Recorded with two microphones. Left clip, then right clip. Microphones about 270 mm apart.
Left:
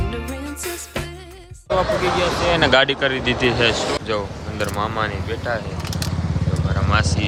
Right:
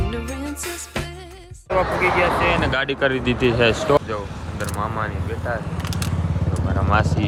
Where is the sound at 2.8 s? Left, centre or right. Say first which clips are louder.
Left 1 dB; centre.